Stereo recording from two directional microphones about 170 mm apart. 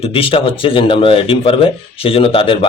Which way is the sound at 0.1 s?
30° left (ahead or behind).